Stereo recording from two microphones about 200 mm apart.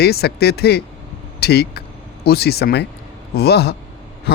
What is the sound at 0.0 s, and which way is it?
A man's voice, 55° left (ahead or behind).